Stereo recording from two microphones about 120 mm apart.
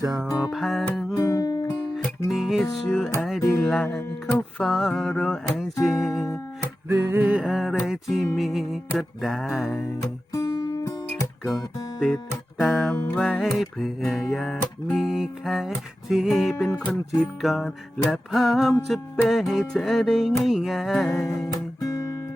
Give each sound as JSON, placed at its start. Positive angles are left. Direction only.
{"t": 0.3, "sound": "music", "side_deg": -5}
{"t": 1.1, "sound": "music", "side_deg": 25}
{"t": 2.3, "sound": "music", "side_deg": 0}
{"t": 6.8, "sound": "music", "side_deg": -20}
{"t": 10.3, "sound": "music", "side_deg": 30}
{"t": 11.9, "sound": "speech", "side_deg": 0}
{"t": 13.1, "sound": "music", "side_deg": 0}
{"t": 21.2, "sound": "guitar", "side_deg": 30}